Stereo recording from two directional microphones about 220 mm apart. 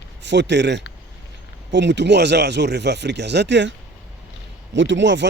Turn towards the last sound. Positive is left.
turn(degrees=-55)  # may be behind; listen again after turning